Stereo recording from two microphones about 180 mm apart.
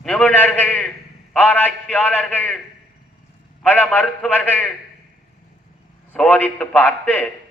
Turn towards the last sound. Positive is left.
turn(degrees=10)  # may be behind; listen again after turning